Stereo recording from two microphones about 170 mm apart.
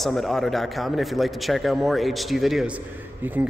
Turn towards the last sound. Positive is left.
turn(degrees=-10)  # may be behind; listen again after turning